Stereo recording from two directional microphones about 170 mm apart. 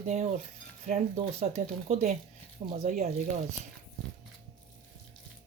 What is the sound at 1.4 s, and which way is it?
Speech, 40° right (ahead or behind).